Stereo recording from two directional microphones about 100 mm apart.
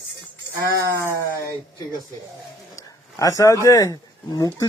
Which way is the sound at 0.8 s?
30° right (ahead or behind).